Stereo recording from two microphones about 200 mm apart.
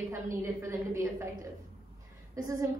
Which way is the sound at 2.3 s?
15° right (ahead or behind).